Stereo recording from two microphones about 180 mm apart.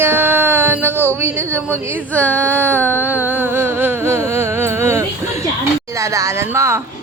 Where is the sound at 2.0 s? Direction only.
10° left (ahead or behind).